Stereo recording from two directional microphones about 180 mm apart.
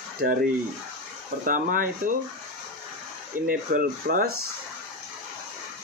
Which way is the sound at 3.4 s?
50° right (ahead or behind).